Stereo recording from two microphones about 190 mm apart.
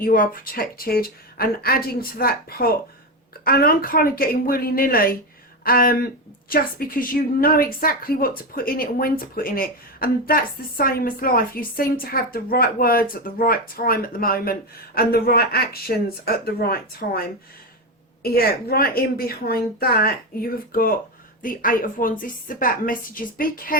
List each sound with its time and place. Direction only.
0.0 s a woman's voice: 50° left (ahead or behind)